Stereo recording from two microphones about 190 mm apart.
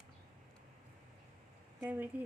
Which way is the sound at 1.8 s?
10° right (ahead or behind).